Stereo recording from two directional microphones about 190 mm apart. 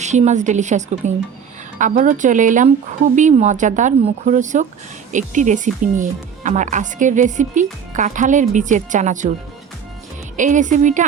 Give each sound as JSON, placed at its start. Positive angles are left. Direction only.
{"t": 0.0, "sound": "speech", "side_deg": -40}
{"t": 10.3, "sound": "speech", "side_deg": -40}